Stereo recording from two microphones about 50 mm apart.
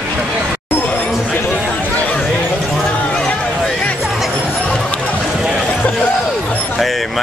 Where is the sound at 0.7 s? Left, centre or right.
Left.